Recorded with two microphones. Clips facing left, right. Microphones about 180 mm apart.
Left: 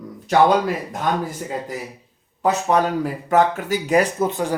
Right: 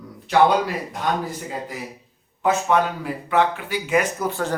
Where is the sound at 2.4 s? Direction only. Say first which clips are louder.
Left 1 dB; 35° left (ahead or behind).